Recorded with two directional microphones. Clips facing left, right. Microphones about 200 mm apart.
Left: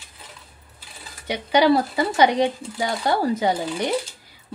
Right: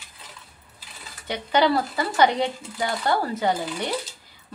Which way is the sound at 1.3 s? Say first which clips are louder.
Left 4 dB; 10° left (ahead or behind).